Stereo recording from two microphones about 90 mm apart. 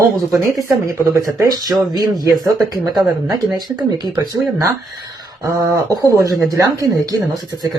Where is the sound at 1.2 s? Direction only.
45° right (ahead or behind).